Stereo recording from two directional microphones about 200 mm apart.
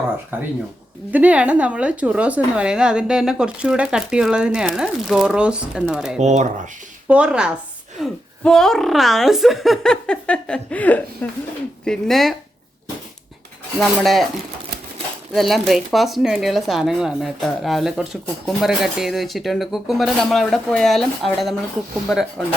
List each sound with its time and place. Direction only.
0.3 s speech: 10° right (ahead or behind)
6.1 s speech: 35° right (ahead or behind)
7.1 s speech: 5° right (ahead or behind)
13.7 s speech: centre (ahead or behind)
15.3 s speech: centre (ahead or behind)